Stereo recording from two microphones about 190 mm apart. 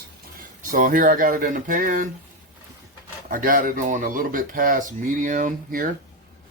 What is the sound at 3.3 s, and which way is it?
Speech, 45° right (ahead or behind).